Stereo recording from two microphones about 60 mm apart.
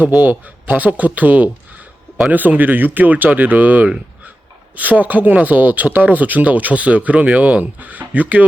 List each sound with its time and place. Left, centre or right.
0.0 s speech: right